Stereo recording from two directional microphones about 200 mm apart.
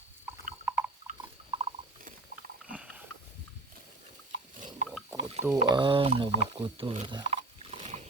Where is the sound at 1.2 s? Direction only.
25° right (ahead or behind).